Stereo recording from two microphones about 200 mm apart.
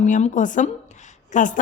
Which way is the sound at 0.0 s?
40° left (ahead or behind).